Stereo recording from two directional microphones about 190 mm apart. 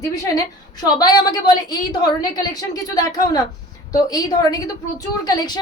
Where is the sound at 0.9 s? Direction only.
20° left (ahead or behind).